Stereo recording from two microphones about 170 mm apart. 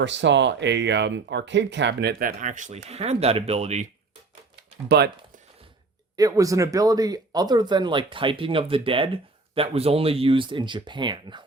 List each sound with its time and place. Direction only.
0.0 s speech: 90° right; by 3.8 s 40° right (ahead or behind)
4.9 s speech: 70° right (ahead or behind)
6.1 s speech: 20° right (ahead or behind)